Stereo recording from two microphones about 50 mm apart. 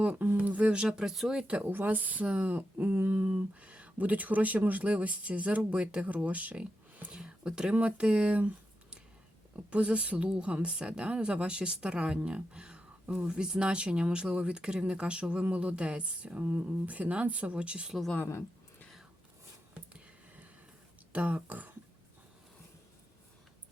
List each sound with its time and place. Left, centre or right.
0.1 s speech: right; by 1.3 s centre
1.3 s a woman's voice: right
1.7 s speech: right
9.6 s a woman's voice: right
19.9 s a sound: right
21.1 s speech: right